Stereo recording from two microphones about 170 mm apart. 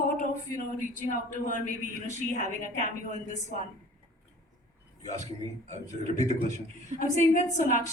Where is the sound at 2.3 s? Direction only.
40° right (ahead or behind).